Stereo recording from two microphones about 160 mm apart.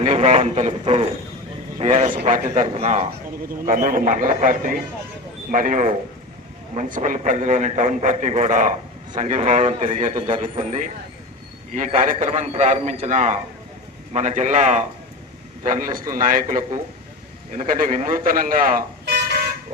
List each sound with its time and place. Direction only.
0.0 s a man's voice: 40° right (ahead or behind)
3.7 s a man's voice: 60° right (ahead or behind)
15.6 s speech: 60° right (ahead or behind)